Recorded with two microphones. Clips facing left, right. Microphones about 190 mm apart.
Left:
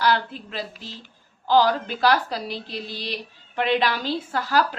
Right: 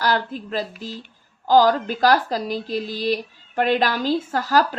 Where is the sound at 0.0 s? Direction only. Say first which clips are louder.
Even; 45° right (ahead or behind).